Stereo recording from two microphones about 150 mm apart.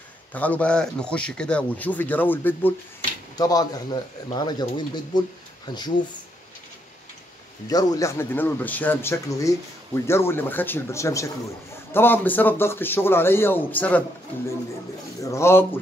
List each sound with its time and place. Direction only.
0.3 s a man's voice: 10° left (ahead or behind)
3.3 s speech: 25° left (ahead or behind)
7.6 s a man's voice: 25° left (ahead or behind)
15.2 s a man's voice: 20° left (ahead or behind)